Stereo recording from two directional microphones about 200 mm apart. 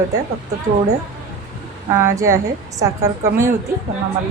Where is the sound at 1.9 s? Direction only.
15° right (ahead or behind).